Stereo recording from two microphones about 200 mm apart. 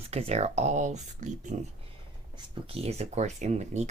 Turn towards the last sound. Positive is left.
turn(degrees=-35)  # may be behind; listen again after turning